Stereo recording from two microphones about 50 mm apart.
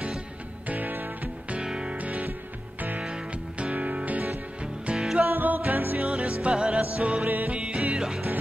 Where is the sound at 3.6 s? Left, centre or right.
Right.